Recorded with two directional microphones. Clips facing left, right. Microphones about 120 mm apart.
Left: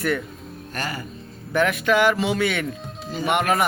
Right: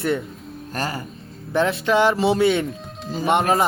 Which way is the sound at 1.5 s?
25° right (ahead or behind).